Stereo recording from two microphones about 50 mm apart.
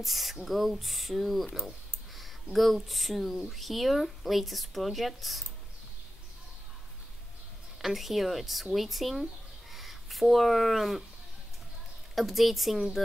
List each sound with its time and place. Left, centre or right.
0.0 s speech: centre
7.8 s speech: centre
12.2 s speech: centre